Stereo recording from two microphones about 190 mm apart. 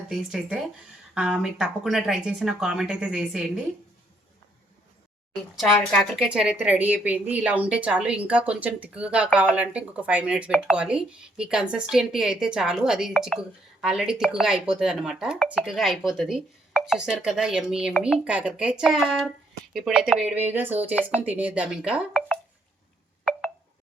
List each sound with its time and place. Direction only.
0.1 s speech: 5° right (ahead or behind)
5.5 s a woman's voice: centre (ahead or behind)